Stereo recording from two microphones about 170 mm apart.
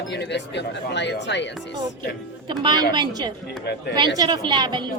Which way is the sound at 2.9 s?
25° right (ahead or behind).